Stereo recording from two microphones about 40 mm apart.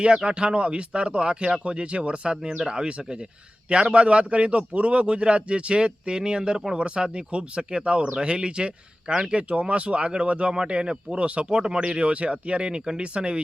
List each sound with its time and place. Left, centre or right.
0.3 s a man's voice: right